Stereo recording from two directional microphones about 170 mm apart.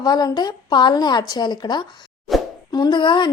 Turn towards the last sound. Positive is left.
turn(degrees=25)  # may be behind; listen again after turning